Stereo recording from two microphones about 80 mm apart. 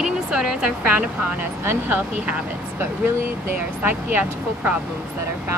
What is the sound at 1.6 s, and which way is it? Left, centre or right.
Speech, right.